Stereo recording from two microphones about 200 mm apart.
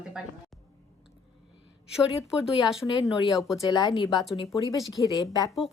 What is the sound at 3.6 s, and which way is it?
Speech, 20° left (ahead or behind).